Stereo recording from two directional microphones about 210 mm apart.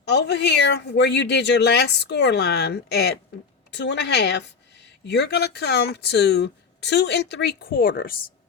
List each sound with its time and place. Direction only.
0.0 s a woman's voice: 55° left (ahead or behind)